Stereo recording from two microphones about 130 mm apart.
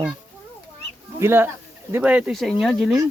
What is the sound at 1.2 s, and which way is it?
Speech, 20° right (ahead or behind).